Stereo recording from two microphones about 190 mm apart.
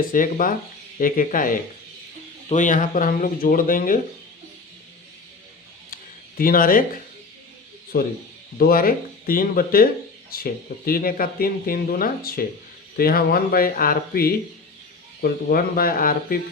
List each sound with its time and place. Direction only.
0.0 s speech: 45° left (ahead or behind)
5.9 s a sound: 50° left (ahead or behind)
7.9 s speech: 55° left (ahead or behind)